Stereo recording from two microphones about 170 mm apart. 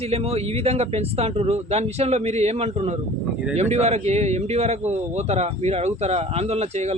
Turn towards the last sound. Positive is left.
turn(degrees=-40)  # may be behind; listen again after turning